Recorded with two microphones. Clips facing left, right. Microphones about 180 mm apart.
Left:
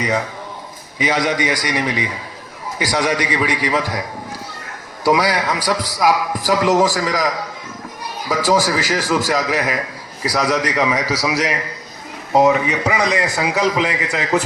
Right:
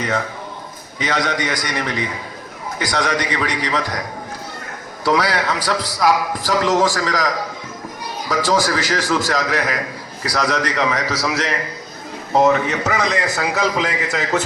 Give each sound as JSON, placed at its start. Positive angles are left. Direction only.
{"t": 0.9, "sound": "a man's voice", "side_deg": 10}
{"t": 2.7, "sound": "a man's voice", "side_deg": 5}
{"t": 5.0, "sound": "a man's voice", "side_deg": 15}
{"t": 8.3, "sound": "a man's voice", "side_deg": 10}